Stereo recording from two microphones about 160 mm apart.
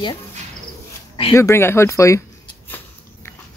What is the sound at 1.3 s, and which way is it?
Speech, 15° left (ahead or behind).